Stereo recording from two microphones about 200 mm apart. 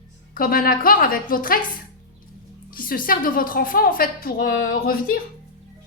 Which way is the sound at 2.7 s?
45° left (ahead or behind).